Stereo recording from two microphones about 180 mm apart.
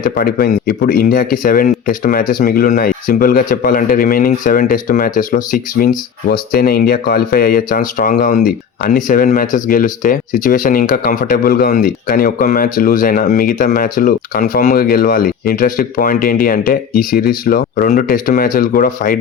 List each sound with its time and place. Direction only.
0.0 s speech: 55° left (ahead or behind)